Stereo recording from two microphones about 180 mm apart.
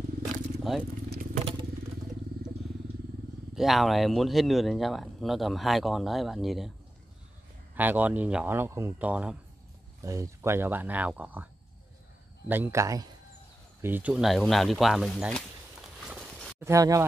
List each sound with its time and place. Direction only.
0.2 s wild animals: centre (ahead or behind)
1.4 s motorcycle: 25° right (ahead or behind)
3.5 s speech: centre (ahead or behind)
7.7 s speech: 10° right (ahead or behind)
12.4 s speech: 10° right (ahead or behind)
16.1 s a sound: 5° right (ahead or behind)
16.5 s speech: 15° right (ahead or behind)